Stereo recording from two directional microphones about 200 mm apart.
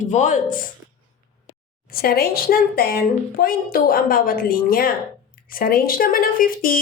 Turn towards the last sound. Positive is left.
turn(degrees=45)  # may be behind; listen again after turning